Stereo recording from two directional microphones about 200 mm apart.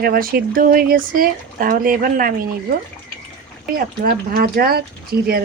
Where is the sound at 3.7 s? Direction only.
45° right (ahead or behind).